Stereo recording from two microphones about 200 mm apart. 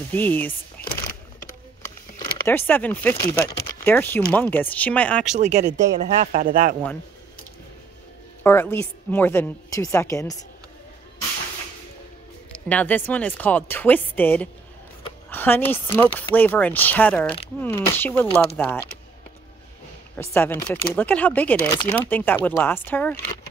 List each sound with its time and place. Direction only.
0.1 s speech: 10° left (ahead or behind)
0.8 s a sound: 10° left (ahead or behind)
2.1 s speech: 10° left (ahead or behind)
5.3 s speech: 35° right (ahead or behind)
8.5 s speech: 10° left (ahead or behind)
12.5 s speech: 5° left (ahead or behind)
20.2 s speech: 10° left (ahead or behind)